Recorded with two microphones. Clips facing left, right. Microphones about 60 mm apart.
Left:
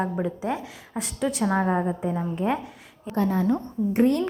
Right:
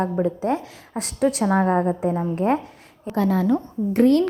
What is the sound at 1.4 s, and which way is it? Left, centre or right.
Speech, right.